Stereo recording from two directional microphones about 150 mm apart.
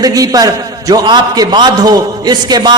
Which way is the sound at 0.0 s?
25° right (ahead or behind).